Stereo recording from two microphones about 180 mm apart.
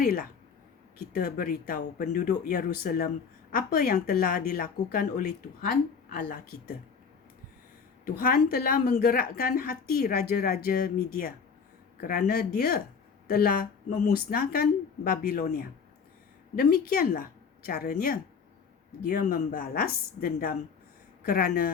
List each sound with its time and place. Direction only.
0.0 s a woman's voice: 55° left (ahead or behind)
8.0 s a woman's voice: 50° left (ahead or behind)